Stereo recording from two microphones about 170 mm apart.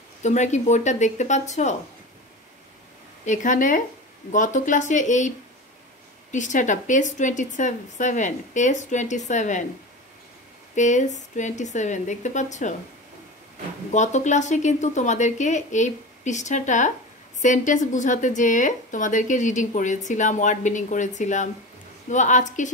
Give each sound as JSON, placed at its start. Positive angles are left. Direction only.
{"t": 0.2, "sound": "a woman's voice", "side_deg": 45}
{"t": 3.3, "sound": "a woman's voice", "side_deg": 50}
{"t": 6.3, "sound": "a woman's voice", "side_deg": 45}
{"t": 10.7, "sound": "a woman's voice", "side_deg": 45}
{"t": 13.9, "sound": "a woman's voice", "side_deg": 45}